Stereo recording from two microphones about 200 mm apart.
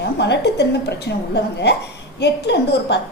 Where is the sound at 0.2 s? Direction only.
55° left (ahead or behind).